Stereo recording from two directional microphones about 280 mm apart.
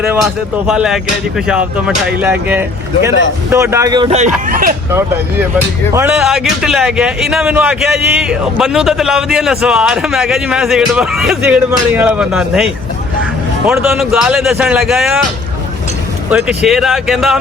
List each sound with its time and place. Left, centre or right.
0.7 s speech: centre; by 4.7 s right
5.9 s speech: centre
16.3 s speech: centre